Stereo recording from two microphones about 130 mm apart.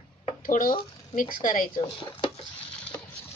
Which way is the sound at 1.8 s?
40° left (ahead or behind).